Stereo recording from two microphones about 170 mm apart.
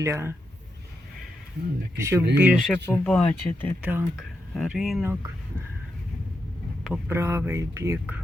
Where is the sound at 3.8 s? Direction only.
10° right (ahead or behind).